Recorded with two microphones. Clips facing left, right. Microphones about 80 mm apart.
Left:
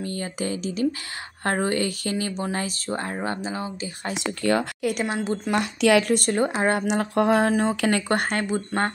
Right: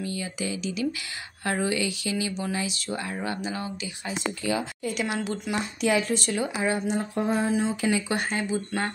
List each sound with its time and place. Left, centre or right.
0.0 s speech: left
4.1 s speech: left
4.5 s speech: left
5.0 s speech: left
5.5 s a sound: left
6.1 s speech: left
6.9 s a sound: left
7.6 s speech: left